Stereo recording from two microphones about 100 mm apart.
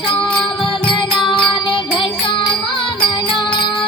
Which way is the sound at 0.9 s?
55° left (ahead or behind).